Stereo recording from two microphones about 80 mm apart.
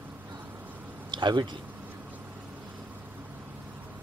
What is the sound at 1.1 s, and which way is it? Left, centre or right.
Speech, right.